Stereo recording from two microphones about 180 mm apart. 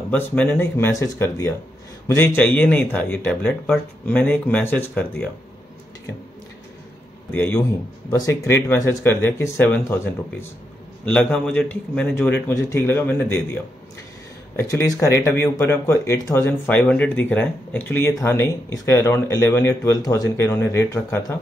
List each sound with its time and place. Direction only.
0.1 s speech: 10° left (ahead or behind)
7.2 s speech: 10° left (ahead or behind)
11.1 s speech: 10° left (ahead or behind)
14.6 s speech: 20° left (ahead or behind)